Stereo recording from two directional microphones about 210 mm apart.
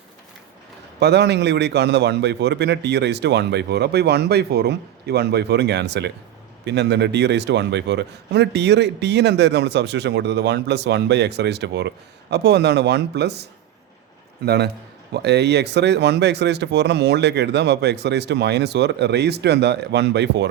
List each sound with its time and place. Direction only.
0.9 s a man's voice: 50° right (ahead or behind)